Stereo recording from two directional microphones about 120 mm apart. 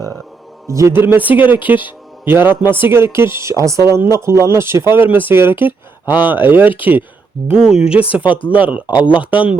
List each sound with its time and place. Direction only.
0.7 s speech: 25° right (ahead or behind)